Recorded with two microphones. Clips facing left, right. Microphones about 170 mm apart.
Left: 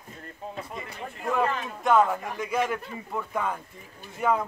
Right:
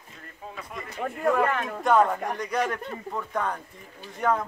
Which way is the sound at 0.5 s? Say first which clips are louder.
Even; 25° left (ahead or behind).